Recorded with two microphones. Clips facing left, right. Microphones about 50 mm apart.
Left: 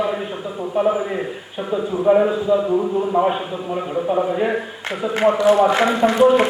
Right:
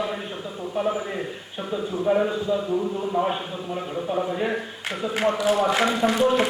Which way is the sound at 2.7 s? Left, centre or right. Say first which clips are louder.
Left 6 dB; left.